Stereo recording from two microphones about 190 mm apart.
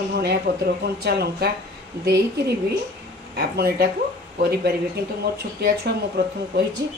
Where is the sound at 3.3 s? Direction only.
55° right (ahead or behind).